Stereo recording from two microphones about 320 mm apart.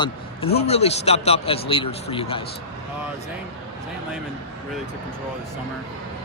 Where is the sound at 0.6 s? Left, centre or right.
Centre.